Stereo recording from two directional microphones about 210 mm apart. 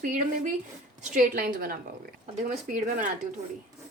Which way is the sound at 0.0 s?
40° right (ahead or behind).